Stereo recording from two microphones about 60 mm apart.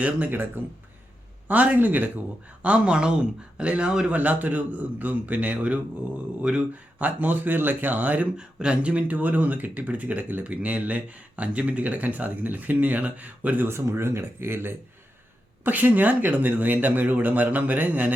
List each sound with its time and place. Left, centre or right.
0.3 s speech: right
1.5 s speech: right
4.2 s speech: right
7.0 s speech: right
13.7 s speech: right
15.6 s speech: right